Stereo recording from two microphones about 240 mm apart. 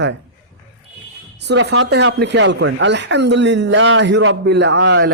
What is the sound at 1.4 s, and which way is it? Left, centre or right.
Speech, right.